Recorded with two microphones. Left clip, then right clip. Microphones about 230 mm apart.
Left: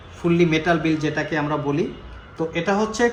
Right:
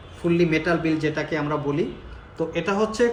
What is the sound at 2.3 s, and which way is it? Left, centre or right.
Speech, left.